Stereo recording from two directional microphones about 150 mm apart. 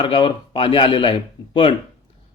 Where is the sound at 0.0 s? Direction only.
35° left (ahead or behind).